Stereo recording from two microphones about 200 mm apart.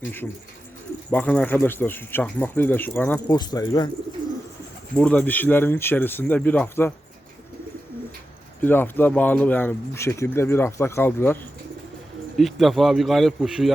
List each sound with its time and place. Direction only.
1.1 s speech: 5° left (ahead or behind)
4.9 s speech: 5° left (ahead or behind)
8.6 s speech: 10° left (ahead or behind)
12.4 s a man's voice: centre (ahead or behind)